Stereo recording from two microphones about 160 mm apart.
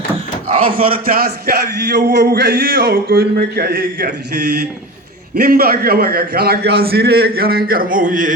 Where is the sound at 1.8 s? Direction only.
90° right; by 3.7 s 75° right (ahead or behind).